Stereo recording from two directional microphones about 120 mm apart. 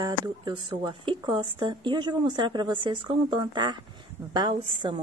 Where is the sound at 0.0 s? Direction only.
40° right (ahead or behind).